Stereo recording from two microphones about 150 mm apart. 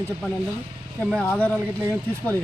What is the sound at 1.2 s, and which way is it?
Speech, 10° left (ahead or behind).